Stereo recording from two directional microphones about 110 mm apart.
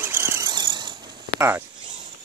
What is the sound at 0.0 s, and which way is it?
Squeal, 20° right (ahead or behind).